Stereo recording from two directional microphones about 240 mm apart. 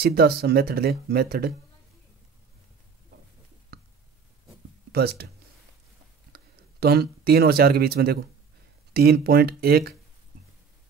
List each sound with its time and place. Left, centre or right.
0.0 s speech: right
4.9 s speech: right
6.3 s speech: right